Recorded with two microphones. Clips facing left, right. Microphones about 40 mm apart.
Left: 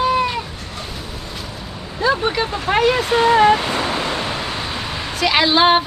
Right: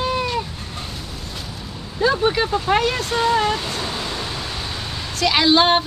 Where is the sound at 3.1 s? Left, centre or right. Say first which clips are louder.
Left 6 dB; left.